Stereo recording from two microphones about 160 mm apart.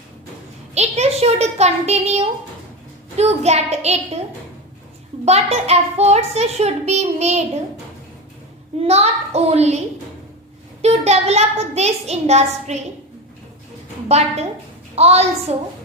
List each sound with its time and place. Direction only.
0.7 s a child's voice: 40° right (ahead or behind)
5.2 s a child's voice: 40° right (ahead or behind)
8.8 s a child's voice: 40° right (ahead or behind)
10.8 s a child's voice: 45° right (ahead or behind)
14.1 s a child's voice: 40° right (ahead or behind)